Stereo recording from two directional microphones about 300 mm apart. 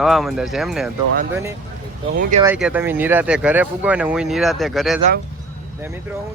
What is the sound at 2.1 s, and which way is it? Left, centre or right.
Speech, right.